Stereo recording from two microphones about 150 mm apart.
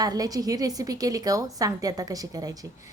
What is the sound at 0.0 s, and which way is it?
A woman's voice, 25° right (ahead or behind).